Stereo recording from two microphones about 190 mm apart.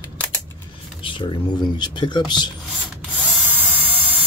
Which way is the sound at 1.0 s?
25° left (ahead or behind).